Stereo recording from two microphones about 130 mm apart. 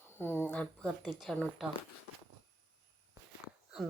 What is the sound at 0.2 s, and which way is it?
A woman's voice, 15° left (ahead or behind).